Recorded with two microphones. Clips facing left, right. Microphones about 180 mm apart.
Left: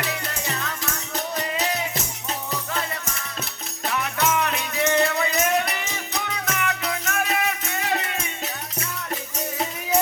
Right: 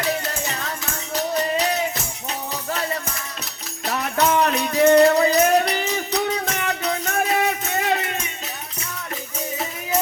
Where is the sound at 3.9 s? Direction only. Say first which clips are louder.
Right 4 dB; 35° right (ahead or behind).